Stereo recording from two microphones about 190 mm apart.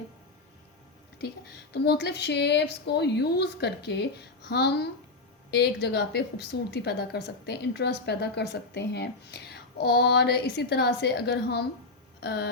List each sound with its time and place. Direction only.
1.2 s a woman's voice: 60° left (ahead or behind)